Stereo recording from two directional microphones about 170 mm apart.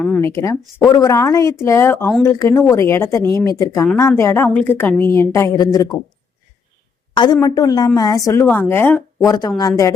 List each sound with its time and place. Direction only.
0.0 s a woman's voice: 10° left (ahead or behind)
7.1 s a woman's voice: 25° left (ahead or behind)